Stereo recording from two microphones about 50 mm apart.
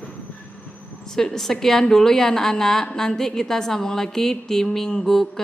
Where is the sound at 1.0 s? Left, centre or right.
Centre.